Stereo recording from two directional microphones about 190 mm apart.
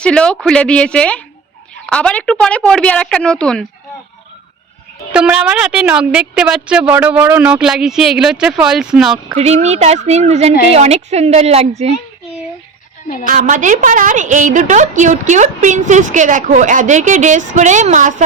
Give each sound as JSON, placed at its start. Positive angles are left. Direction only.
{"t": 0.0, "sound": "speech", "side_deg": 5}
{"t": 5.1, "sound": "speech", "side_deg": -5}
{"t": 9.1, "sound": "a woman's voice", "side_deg": -35}
{"t": 13.2, "sound": "a woman's voice", "side_deg": -45}